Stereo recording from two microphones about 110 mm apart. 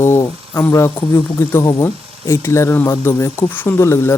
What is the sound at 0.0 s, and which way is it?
Speech, 25° left (ahead or behind).